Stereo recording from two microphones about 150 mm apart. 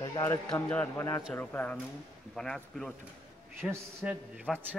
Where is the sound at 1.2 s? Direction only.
5° left (ahead or behind).